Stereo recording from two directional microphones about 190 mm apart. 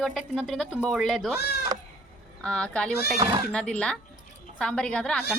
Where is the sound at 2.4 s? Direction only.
5° left (ahead or behind).